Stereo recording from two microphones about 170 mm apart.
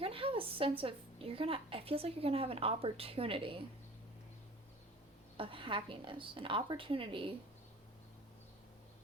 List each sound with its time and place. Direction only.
0.0 s a woman's voice: 35° right (ahead or behind)
5.4 s a woman's voice: 30° right (ahead or behind)